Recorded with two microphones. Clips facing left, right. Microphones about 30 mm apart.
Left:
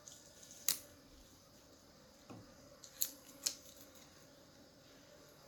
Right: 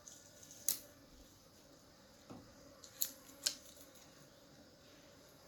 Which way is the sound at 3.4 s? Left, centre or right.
Right.